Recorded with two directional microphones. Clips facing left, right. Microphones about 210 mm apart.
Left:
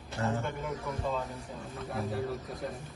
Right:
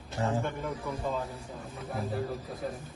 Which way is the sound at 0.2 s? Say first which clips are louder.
Right 2 dB; 30° right (ahead or behind).